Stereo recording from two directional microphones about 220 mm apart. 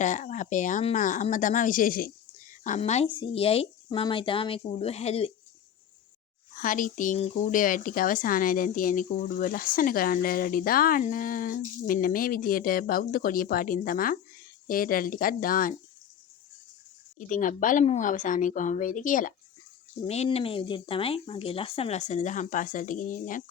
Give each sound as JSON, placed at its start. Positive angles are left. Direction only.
{"t": 0.0, "sound": "speech", "side_deg": 35}
{"t": 6.6, "sound": "speech", "side_deg": 35}
{"t": 17.2, "sound": "speech", "side_deg": 35}